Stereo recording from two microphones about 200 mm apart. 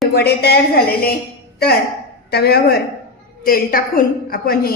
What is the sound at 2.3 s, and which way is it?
A woman's voice, 55° left (ahead or behind).